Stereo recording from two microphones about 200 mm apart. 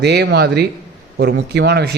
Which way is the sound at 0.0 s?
60° right (ahead or behind).